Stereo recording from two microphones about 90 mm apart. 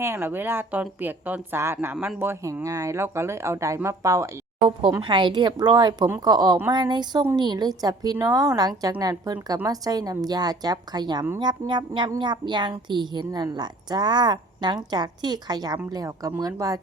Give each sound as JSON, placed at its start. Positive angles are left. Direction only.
{"t": 0.0, "sound": "a woman's voice", "side_deg": -25}
{"t": 4.9, "sound": "a woman's voice", "side_deg": -65}